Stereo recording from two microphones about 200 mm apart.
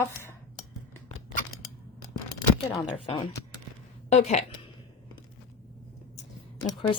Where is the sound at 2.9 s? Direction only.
25° left (ahead or behind).